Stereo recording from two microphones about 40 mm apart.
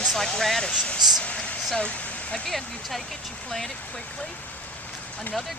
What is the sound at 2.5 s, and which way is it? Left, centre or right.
Speech, centre.